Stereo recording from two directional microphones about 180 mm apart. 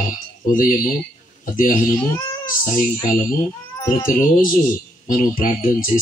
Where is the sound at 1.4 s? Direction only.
50° left (ahead or behind).